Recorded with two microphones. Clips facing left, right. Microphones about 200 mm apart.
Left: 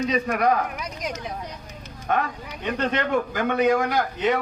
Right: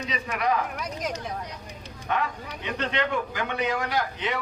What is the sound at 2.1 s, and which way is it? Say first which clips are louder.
A man's voice: left 3 dB; 45° left (ahead or behind).